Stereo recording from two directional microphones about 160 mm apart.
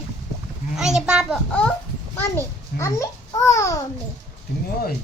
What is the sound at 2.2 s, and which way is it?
A child's voice, 15° left (ahead or behind).